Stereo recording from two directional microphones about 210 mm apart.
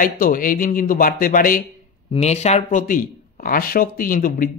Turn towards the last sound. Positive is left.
turn(degrees=40)  # may be behind; listen again after turning